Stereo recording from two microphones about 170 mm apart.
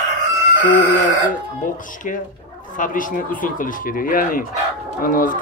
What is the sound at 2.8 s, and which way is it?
Speech, 50° left (ahead or behind).